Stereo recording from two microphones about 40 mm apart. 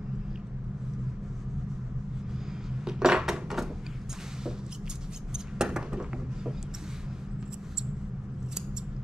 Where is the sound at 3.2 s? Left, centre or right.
Centre.